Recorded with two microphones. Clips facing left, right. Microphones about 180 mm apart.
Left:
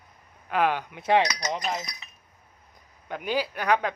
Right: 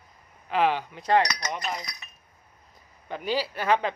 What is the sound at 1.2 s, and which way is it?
Speech, 15° left (ahead or behind).